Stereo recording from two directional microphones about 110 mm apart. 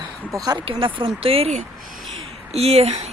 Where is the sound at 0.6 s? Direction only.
55° right (ahead or behind).